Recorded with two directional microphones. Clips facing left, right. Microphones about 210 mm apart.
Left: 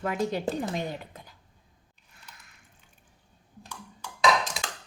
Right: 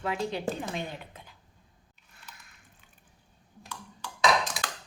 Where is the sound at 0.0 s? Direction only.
45° left (ahead or behind).